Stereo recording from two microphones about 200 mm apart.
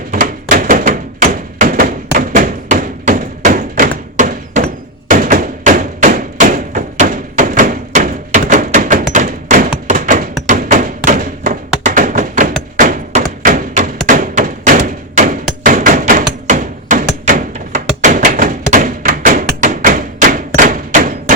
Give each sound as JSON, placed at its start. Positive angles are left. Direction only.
{"t": 0.1, "sound": "thunk", "side_deg": -40}
{"t": 5.0, "sound": "thump", "side_deg": -40}
{"t": 15.6, "sound": "hammer", "side_deg": -40}
{"t": 16.5, "sound": "a sound", "side_deg": -40}